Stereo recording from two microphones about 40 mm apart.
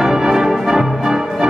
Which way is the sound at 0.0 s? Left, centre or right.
Centre.